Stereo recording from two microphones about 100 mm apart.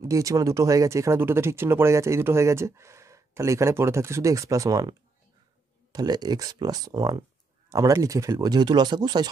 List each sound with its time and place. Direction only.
0.0 s speech: 35° right (ahead or behind)